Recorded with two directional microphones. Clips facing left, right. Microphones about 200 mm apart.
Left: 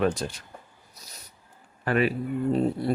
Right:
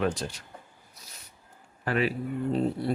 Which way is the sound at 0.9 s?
40° left (ahead or behind).